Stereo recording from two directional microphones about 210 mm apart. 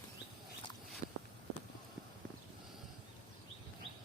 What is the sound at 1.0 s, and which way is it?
Walk, 35° right (ahead or behind).